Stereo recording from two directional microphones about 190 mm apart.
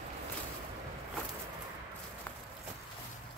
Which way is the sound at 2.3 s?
5° left (ahead or behind).